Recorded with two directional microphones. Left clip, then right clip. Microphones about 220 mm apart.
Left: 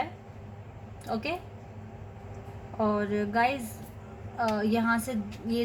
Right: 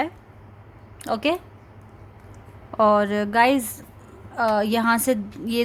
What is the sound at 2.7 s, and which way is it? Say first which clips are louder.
A woman's voice: right 11 dB; 50° right (ahead or behind).